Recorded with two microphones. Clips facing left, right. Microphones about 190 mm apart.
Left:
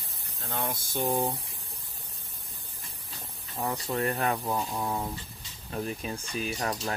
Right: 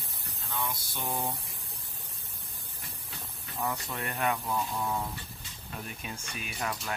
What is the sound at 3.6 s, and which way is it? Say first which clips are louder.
Speech: left 5 dB; 35° left (ahead or behind).